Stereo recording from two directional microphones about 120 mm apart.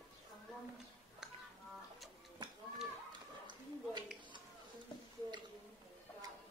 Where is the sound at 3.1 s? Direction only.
40° right (ahead or behind).